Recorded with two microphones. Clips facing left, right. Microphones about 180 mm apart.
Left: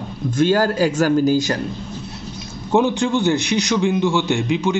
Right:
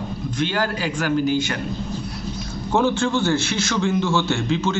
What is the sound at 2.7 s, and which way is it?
A man's voice, 15° left (ahead or behind).